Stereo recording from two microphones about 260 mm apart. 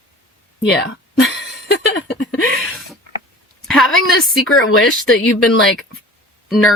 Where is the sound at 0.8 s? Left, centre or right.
Left.